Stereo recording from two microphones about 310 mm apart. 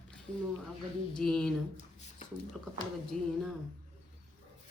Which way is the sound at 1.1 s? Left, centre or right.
Centre.